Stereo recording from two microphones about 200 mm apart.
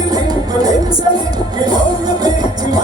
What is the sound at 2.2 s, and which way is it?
Music, 20° right (ahead or behind).